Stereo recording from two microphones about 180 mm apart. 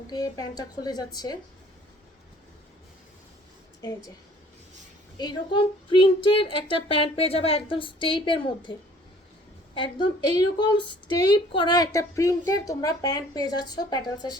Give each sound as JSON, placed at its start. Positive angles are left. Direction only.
{"t": 0.1, "sound": "a woman's voice", "side_deg": 20}
{"t": 3.8, "sound": "a woman's voice", "side_deg": 20}
{"t": 5.1, "sound": "a woman's voice", "side_deg": 25}
{"t": 9.7, "sound": "a woman's voice", "side_deg": 25}